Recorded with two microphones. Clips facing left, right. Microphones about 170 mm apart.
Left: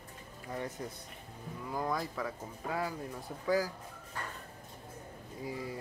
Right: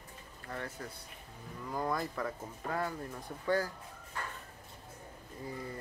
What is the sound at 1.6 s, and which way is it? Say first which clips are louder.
Speech: even; centre (ahead or behind).